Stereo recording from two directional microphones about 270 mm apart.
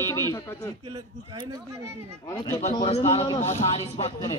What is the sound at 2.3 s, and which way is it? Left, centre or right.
A man's voice, centre.